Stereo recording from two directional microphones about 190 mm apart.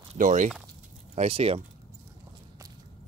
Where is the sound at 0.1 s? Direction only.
40° right (ahead or behind).